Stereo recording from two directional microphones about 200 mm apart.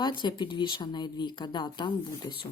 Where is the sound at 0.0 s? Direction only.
20° left (ahead or behind).